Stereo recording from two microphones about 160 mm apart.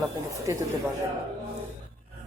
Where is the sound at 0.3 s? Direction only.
20° right (ahead or behind).